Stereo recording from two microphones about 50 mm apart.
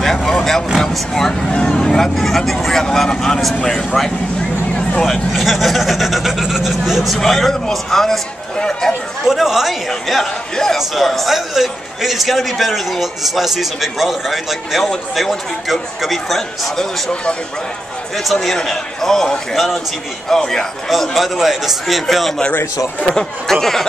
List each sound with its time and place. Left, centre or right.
0.0 s vehicle: centre
0.8 s speech: centre
1.5 s speech: centre
5.3 s a man's voice: centre
7.2 s speech: centre
9.2 s a man's voice: centre
17.1 s speech: left
18.1 s a man's voice: centre
20.9 s a man's voice: centre